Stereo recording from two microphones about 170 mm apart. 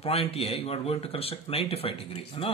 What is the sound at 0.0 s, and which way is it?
Speech, 35° left (ahead or behind).